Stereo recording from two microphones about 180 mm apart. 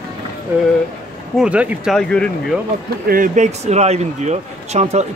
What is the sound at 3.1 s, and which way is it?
Speech, 45° right (ahead or behind).